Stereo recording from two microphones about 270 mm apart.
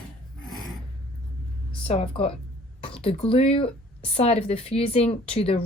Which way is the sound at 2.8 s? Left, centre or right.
Left.